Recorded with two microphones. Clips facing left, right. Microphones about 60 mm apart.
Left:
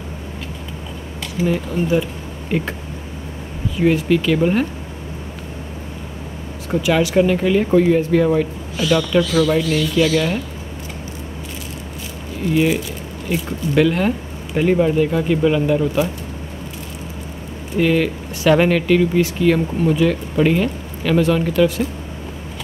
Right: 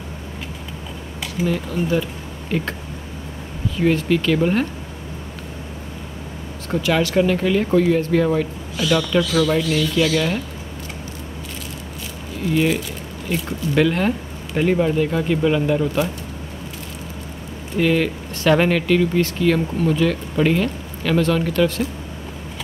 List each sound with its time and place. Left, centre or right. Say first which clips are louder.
1.5 s speech: left 3 dB; centre
3.7 s speech: left 2 dB; centre
6.7 s speech: left 2 dB; centre
9.6 s speech: left 2 dB; centre
12.4 s speech: left 2 dB; centre
17.7 s speech: left 2 dB; centre